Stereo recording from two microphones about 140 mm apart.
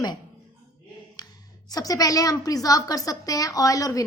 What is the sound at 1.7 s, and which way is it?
A woman's voice, 25° left (ahead or behind).